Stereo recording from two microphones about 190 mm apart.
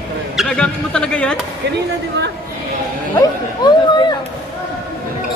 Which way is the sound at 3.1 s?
20° left (ahead or behind).